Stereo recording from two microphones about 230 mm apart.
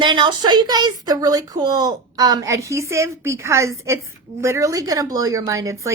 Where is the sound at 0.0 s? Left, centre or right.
Centre.